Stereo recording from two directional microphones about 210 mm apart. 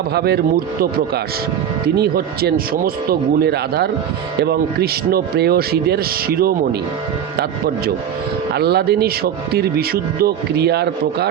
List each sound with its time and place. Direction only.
0.1 s speech: 50° right (ahead or behind)
2.0 s speech: 45° right (ahead or behind)
8.5 s speech: 50° right (ahead or behind)